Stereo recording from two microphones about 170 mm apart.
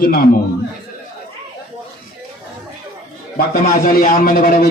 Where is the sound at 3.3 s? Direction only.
55° left (ahead or behind).